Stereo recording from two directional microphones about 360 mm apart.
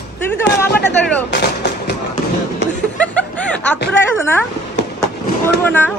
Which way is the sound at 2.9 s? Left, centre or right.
Centre.